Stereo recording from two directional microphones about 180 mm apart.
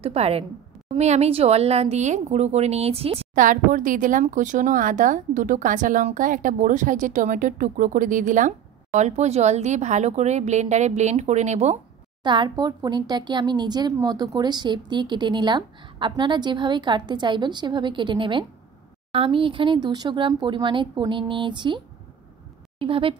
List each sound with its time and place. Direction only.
0.0 s speech: 35° right (ahead or behind)
3.3 s speech: 45° right (ahead or behind)
12.2 s speech: 25° right (ahead or behind)